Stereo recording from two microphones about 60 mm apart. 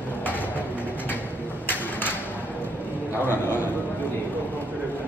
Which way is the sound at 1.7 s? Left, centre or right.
Left.